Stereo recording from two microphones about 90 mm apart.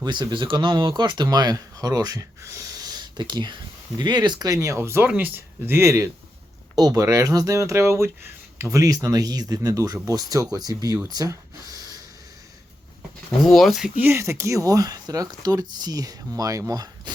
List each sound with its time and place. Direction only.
0.0 s speech: 55° right (ahead or behind)
4.8 s speech: 25° right (ahead or behind)
6.7 s speech: 45° right (ahead or behind)
13.4 s speech: centre (ahead or behind)
14.1 s speech: 30° right (ahead or behind)